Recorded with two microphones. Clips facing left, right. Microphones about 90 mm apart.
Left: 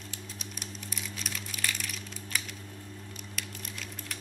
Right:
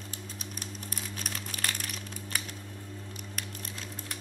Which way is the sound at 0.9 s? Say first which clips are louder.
Even; 45° right (ahead or behind).